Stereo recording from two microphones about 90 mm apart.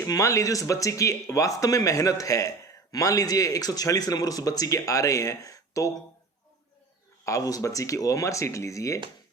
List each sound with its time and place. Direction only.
0.0 s speech: 35° left (ahead or behind)
7.3 s speech: 40° left (ahead or behind)